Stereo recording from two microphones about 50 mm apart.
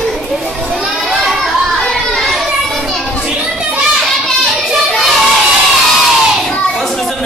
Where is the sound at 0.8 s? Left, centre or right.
Centre.